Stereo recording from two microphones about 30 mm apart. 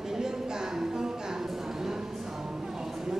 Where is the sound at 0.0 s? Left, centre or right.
Centre.